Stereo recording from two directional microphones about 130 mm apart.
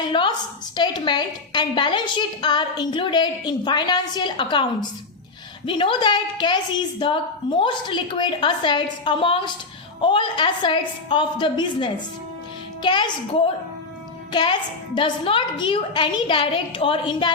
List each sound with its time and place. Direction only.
0.1 s a woman's voice: 35° left (ahead or behind)
14.9 s a woman's voice: 40° left (ahead or behind)